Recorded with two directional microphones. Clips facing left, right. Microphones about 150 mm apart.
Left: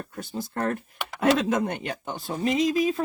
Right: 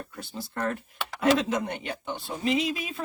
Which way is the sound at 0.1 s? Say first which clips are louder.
Left 5 dB; 45° left (ahead or behind).